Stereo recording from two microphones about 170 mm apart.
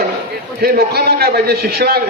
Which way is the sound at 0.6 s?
65° right (ahead or behind).